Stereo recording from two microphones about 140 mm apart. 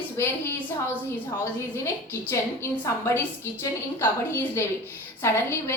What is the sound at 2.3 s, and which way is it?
A woman's voice, 20° left (ahead or behind).